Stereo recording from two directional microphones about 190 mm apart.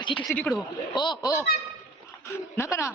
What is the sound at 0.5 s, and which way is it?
Speech, 25° left (ahead or behind).